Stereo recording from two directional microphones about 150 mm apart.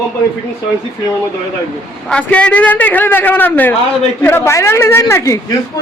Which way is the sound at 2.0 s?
10° left (ahead or behind).